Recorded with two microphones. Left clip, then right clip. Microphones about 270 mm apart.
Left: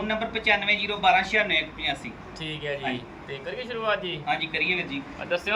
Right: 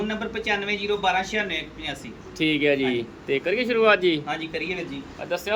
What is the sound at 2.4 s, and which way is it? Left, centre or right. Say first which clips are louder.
Speech: right 11 dB; right.